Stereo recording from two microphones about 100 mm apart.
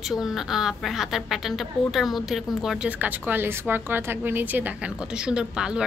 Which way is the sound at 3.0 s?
20° right (ahead or behind).